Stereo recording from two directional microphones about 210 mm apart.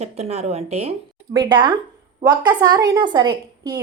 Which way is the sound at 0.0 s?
30° right (ahead or behind).